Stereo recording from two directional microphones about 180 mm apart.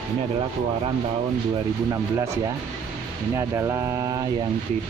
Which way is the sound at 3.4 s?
15° right (ahead or behind).